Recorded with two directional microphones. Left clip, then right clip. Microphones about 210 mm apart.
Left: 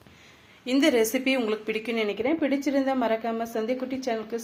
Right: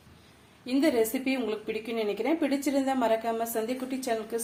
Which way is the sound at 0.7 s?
Centre (ahead or behind).